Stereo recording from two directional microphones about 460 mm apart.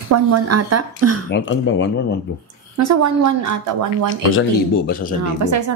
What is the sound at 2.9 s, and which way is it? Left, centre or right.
Speech, right.